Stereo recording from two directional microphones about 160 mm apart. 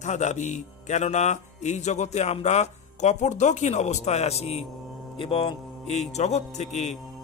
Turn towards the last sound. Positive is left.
turn(degrees=45)  # may be behind; listen again after turning